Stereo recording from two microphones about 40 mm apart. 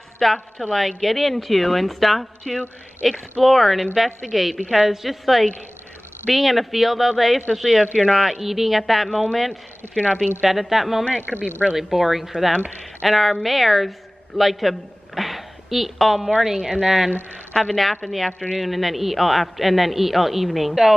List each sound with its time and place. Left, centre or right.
0.2 s a woman's voice: centre
10.4 s a man's voice: centre
11.2 s speech: left
11.7 s a man's voice: centre